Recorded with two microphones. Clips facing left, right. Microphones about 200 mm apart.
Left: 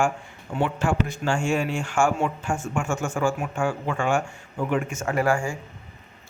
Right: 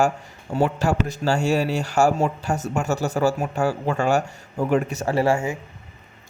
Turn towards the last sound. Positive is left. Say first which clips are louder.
# right 3 dB
turn(degrees=-25)  # may be behind; listen again after turning